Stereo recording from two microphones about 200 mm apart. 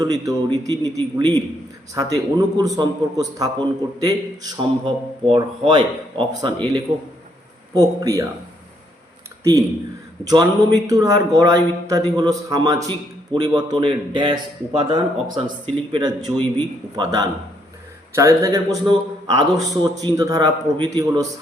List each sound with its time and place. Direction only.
0.0 s speech: 20° right (ahead or behind)
2.0 s speech: 15° right (ahead or behind)
7.8 s a man's voice: 15° right (ahead or behind)
9.4 s speech: 15° right (ahead or behind)